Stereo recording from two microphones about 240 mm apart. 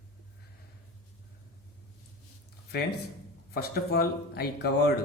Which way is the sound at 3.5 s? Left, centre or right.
Left.